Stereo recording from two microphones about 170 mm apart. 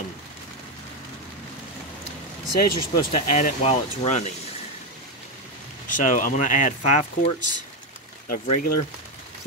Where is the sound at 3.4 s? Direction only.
40° left (ahead or behind).